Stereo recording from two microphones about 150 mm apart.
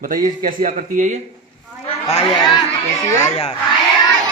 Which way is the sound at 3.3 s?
45° left (ahead or behind).